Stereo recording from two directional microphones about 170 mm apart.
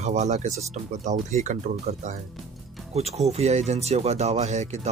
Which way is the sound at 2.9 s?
40° right (ahead or behind).